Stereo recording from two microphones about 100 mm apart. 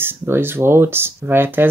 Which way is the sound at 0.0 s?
20° right (ahead or behind).